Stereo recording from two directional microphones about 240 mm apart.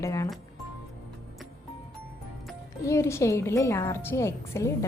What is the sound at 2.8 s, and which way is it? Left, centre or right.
A woman's voice, centre.